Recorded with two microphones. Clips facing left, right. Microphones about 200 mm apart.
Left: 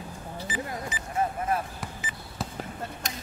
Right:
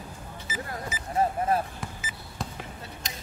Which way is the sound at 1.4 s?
30° right (ahead or behind).